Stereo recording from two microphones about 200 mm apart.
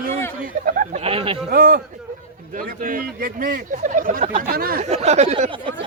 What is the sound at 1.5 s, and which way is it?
Speech, 45° right (ahead or behind).